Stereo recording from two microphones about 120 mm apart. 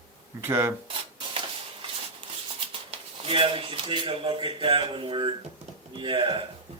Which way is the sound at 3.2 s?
45° right (ahead or behind).